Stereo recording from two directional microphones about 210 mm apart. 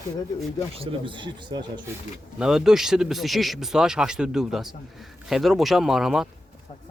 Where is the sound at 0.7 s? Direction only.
25° right (ahead or behind).